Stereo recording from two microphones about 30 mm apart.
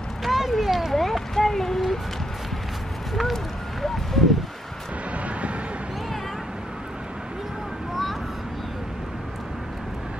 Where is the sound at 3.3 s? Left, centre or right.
Centre.